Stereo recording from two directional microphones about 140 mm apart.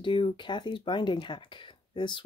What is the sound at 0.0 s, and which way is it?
Speech, 35° left (ahead or behind).